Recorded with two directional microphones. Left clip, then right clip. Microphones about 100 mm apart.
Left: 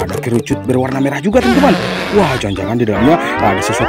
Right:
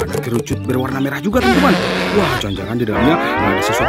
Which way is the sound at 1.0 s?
20° left (ahead or behind).